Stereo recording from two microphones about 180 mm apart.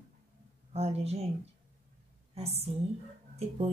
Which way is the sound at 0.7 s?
35° right (ahead or behind).